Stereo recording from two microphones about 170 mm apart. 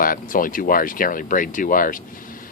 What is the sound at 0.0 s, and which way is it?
Speech, 55° left (ahead or behind).